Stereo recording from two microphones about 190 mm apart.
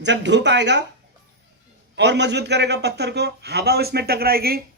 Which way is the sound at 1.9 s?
65° right (ahead or behind).